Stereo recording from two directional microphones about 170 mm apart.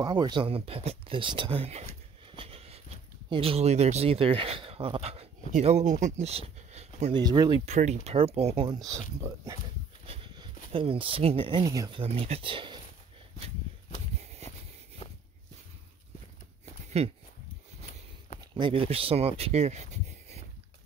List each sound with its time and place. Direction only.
0.0 s speech: 25° right (ahead or behind)
2.3 s a sound: 35° right (ahead or behind)
3.3 s speech: 35° right (ahead or behind)
7.2 s speech: 25° right (ahead or behind)
7.6 s speech: 40° right (ahead or behind)
8.6 s speech: 20° right (ahead or behind)
10.0 s a sound: 30° right (ahead or behind)
10.7 s speech: 30° right (ahead or behind)
12.0 s speech: 35° right (ahead or behind)
14.4 s a sound: 40° right (ahead or behind)
17.0 s speech: 40° right (ahead or behind)
18.4 s speech: 30° right (ahead or behind)